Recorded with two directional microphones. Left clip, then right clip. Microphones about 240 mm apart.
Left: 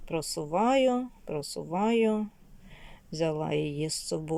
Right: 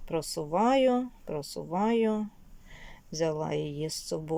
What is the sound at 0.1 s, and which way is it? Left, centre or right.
Speech, centre.